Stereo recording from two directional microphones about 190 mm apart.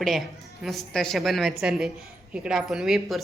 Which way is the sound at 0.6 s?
Centre (ahead or behind).